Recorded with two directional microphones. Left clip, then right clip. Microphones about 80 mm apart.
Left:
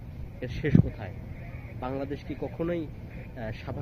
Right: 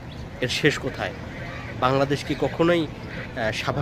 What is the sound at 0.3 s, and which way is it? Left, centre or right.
Speech, right.